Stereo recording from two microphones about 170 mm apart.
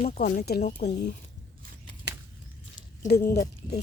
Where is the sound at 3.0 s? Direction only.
65° left (ahead or behind).